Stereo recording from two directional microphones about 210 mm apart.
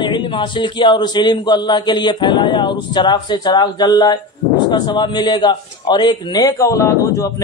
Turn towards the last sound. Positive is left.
turn(degrees=15)  # may be behind; listen again after turning